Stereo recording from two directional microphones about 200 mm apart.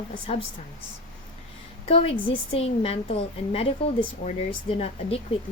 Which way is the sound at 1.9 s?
30° left (ahead or behind).